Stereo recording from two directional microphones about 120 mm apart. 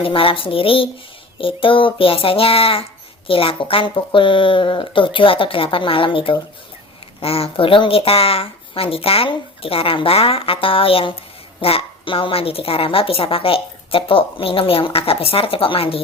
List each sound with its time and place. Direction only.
0.0 s a woman's voice: 50° left (ahead or behind)